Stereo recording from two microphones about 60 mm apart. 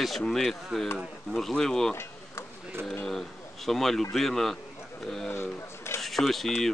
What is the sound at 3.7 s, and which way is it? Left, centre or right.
Speech, centre.